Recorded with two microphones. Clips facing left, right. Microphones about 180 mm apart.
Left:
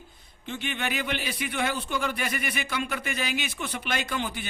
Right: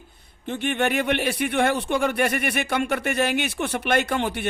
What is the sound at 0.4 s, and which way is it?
Speech, 60° right (ahead or behind).